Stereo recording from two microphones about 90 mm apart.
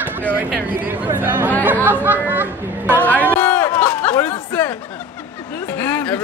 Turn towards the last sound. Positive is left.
turn(degrees=20)  # may be behind; listen again after turning